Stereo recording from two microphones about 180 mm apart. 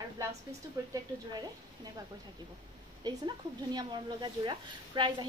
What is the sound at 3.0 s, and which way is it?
Speech, 25° right (ahead or behind).